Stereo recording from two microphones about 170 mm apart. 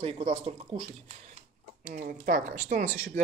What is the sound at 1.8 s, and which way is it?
Speech, 60° right (ahead or behind).